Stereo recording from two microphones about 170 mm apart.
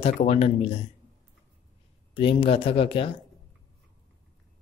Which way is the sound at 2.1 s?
30° left (ahead or behind).